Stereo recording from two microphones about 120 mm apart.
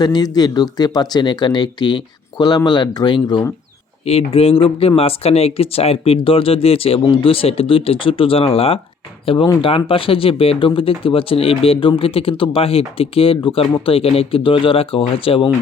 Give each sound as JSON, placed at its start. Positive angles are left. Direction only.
{"t": 0.0, "sound": "speech", "side_deg": 35}
{"t": 4.0, "sound": "speech", "side_deg": 60}